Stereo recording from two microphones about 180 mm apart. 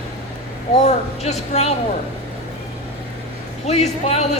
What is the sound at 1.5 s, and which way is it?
Speech, 35° left (ahead or behind).